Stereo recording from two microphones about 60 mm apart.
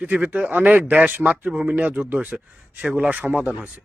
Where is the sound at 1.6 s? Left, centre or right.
Right.